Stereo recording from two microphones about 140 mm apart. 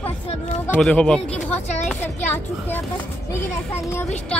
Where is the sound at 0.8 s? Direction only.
5° left (ahead or behind).